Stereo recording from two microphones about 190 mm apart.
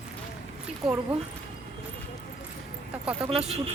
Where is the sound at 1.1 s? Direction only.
30° right (ahead or behind).